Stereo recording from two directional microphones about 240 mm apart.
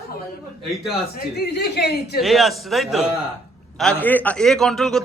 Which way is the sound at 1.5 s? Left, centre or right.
Left.